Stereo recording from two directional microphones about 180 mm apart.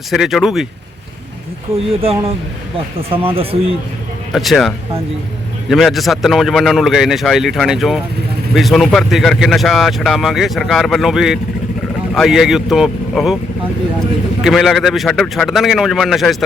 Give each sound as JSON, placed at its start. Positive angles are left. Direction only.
{"t": 0.1, "sound": "speech", "side_deg": 0}
{"t": 2.0, "sound": "speech", "side_deg": -30}
{"t": 4.3, "sound": "speech", "side_deg": 0}
{"t": 14.4, "sound": "speech", "side_deg": 0}